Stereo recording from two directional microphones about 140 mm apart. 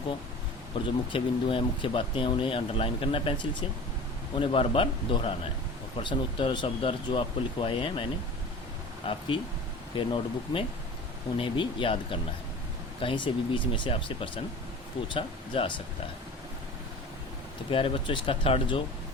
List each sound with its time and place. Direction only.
0.7 s speech: 35° left (ahead or behind)
4.4 s speech: 40° left (ahead or behind)
9.0 s speech: 40° left (ahead or behind)
17.7 s speech: 40° left (ahead or behind)